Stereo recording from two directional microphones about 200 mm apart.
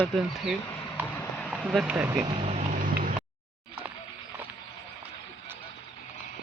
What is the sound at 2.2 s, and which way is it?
Vehicle, 30° right (ahead or behind).